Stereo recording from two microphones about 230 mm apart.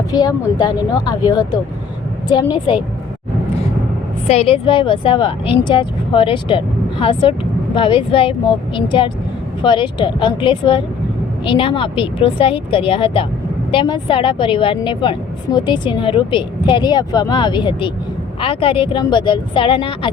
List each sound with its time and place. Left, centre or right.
0.1 s a woman's voice: centre
4.3 s speech: left